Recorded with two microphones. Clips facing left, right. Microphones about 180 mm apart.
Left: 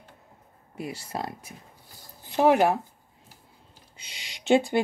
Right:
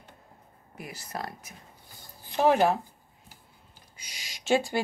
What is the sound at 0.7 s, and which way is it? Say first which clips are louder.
Speech: left 5 dB; 25° left (ahead or behind).